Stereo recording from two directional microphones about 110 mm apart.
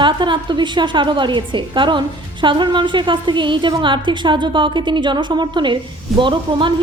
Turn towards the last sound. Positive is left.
turn(degrees=-45)  # may be behind; listen again after turning